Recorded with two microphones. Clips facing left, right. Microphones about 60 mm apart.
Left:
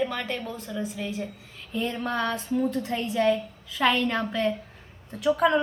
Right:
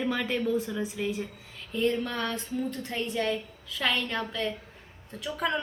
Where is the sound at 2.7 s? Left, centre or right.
Centre.